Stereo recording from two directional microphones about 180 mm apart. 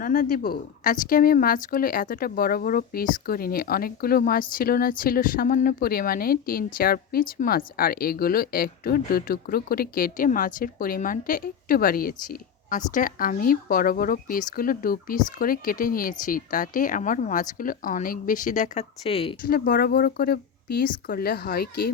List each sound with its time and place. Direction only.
0.0 s speech: 50° left (ahead or behind); by 19.4 s 30° left (ahead or behind)
19.4 s speech: 55° left (ahead or behind)